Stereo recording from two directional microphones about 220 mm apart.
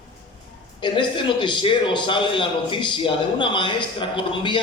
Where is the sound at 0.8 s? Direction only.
20° left (ahead or behind).